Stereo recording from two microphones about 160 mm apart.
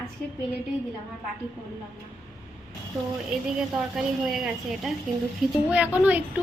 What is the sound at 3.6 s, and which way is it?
A woman's voice, centre (ahead or behind).